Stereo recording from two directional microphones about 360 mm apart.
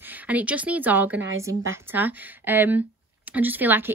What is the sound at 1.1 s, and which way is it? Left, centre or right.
Speech, right.